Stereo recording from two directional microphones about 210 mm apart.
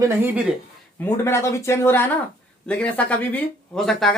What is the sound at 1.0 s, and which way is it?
Speech, 10° left (ahead or behind).